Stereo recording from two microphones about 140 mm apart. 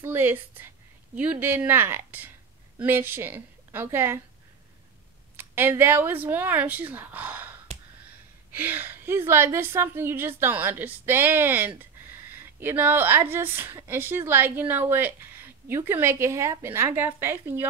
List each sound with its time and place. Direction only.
0.0 s speech: 15° right (ahead or behind)
5.3 s speech: 15° right (ahead or behind)
8.5 s speech: 15° right (ahead or behind)